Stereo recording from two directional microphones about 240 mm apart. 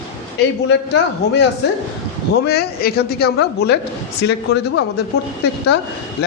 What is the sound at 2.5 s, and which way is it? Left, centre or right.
Speech, left.